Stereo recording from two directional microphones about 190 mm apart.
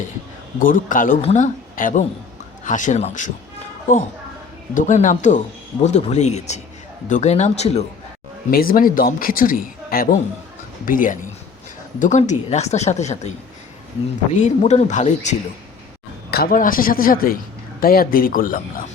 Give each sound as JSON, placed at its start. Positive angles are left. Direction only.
{"t": 0.6, "sound": "a man's voice", "side_deg": 45}
{"t": 4.7, "sound": "speech", "side_deg": 40}
{"t": 8.4, "sound": "a man's voice", "side_deg": 50}
{"t": 14.3, "sound": "speech", "side_deg": 40}
{"t": 16.3, "sound": "a man's voice", "side_deg": 50}